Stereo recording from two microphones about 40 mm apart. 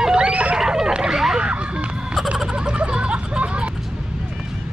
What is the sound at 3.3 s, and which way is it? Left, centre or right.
Vehicle, right.